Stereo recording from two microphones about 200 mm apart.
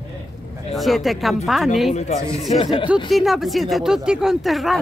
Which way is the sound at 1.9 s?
35° left (ahead or behind).